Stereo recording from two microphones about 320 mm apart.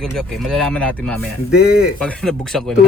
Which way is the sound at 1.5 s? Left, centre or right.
Left.